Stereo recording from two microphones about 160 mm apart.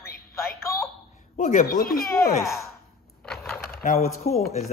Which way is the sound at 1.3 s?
55° left (ahead or behind).